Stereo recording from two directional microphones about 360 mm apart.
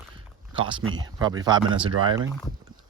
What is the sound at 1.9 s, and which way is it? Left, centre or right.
Speech, right.